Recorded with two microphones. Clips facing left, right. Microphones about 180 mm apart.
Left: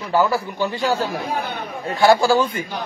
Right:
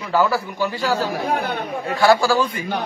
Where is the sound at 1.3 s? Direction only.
70° right (ahead or behind).